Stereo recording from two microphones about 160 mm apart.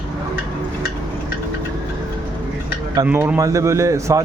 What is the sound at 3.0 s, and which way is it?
Speech, 10° right (ahead or behind).